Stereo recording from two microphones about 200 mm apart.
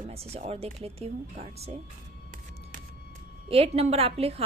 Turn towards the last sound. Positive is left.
turn(degrees=-30)  # may be behind; listen again after turning